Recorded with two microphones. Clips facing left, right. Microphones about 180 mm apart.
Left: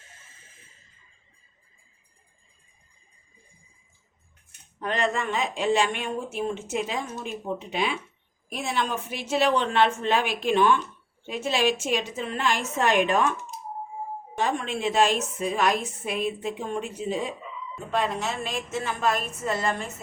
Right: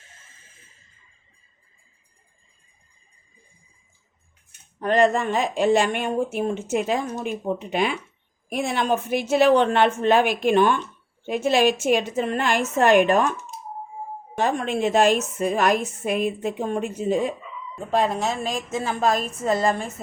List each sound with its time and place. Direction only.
4.8 s a woman's voice: 45° right (ahead or behind)
14.3 s a woman's voice: 50° right (ahead or behind)